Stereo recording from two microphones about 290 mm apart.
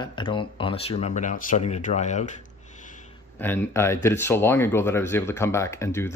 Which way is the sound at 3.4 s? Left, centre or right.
Centre.